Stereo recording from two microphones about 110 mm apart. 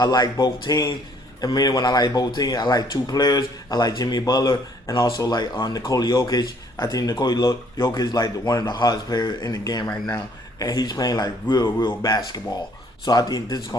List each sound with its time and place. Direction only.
0.0 s speech: 35° left (ahead or behind)